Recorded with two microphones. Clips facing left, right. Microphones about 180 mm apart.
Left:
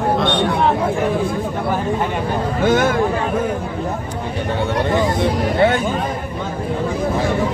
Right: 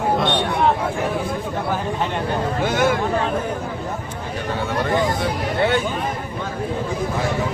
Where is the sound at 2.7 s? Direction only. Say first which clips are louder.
Left 5 dB; 50° left (ahead or behind).